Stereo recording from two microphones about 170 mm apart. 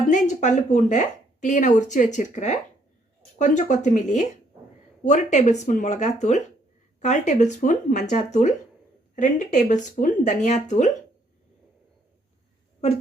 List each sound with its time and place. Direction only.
0.1 s speech: 45° left (ahead or behind)